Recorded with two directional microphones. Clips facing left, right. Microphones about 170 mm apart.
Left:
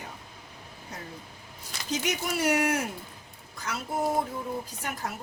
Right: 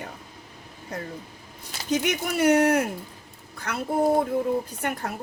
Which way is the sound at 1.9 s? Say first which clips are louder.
Right 5 dB; 60° right (ahead or behind).